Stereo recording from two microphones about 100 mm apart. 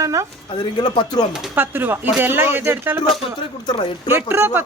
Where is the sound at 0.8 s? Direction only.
45° left (ahead or behind).